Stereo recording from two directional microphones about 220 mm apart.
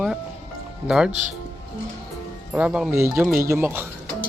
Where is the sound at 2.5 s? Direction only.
5° right (ahead or behind).